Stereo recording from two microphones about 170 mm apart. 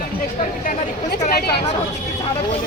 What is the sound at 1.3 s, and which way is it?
Speech, 70° left (ahead or behind).